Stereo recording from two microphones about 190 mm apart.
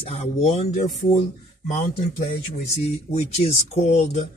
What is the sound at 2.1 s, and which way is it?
Speech, 40° left (ahead or behind).